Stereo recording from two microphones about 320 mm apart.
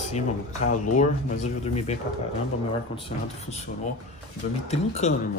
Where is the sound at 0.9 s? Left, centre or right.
Left.